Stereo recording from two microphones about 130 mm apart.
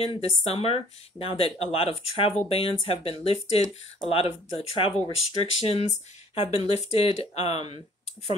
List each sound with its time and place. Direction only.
0.1 s speech: 50° left (ahead or behind)